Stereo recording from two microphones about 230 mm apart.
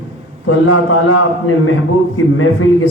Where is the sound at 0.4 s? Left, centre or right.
Left.